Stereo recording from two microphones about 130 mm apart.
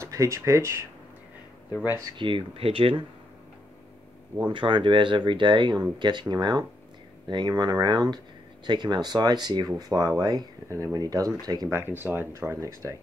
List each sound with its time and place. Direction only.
0.0 s speech: 25° right (ahead or behind)
1.7 s speech: 10° right (ahead or behind)
2.0 s speech: 40° right (ahead or behind)
4.5 s speech: 40° right (ahead or behind)
11.7 s speech: 15° right (ahead or behind)